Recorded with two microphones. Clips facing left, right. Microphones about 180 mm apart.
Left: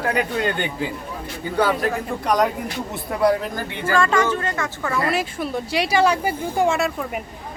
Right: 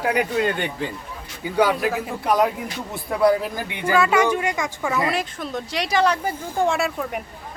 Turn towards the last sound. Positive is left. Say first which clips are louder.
# left 1 dB
turn(degrees=0)  # may be behind; listen again after turning